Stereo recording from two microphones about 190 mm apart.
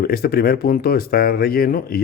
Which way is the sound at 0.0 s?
55° left (ahead or behind).